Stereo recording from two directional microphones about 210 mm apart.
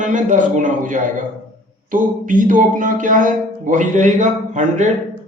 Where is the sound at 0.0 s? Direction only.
35° right (ahead or behind).